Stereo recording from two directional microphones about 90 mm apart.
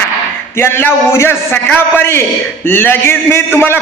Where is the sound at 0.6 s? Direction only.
25° left (ahead or behind).